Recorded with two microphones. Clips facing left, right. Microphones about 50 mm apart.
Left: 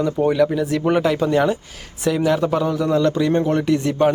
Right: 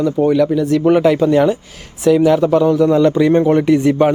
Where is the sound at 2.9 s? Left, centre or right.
Centre.